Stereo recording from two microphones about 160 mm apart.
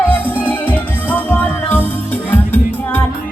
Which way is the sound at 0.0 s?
10° left (ahead or behind).